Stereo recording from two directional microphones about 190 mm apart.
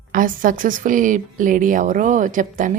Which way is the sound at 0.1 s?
45° right (ahead or behind).